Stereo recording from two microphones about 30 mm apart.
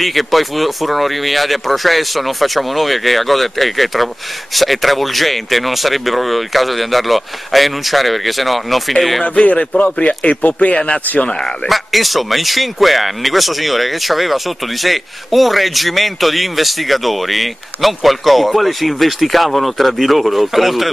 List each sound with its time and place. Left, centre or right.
0.0 s speech: centre
9.2 s speech: left
11.2 s speech: left
11.7 s speech: centre